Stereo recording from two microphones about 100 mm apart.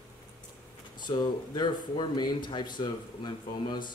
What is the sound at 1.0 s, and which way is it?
Speech, 50° left (ahead or behind).